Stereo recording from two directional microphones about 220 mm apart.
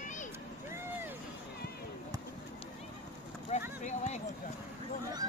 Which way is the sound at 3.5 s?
30° left (ahead or behind).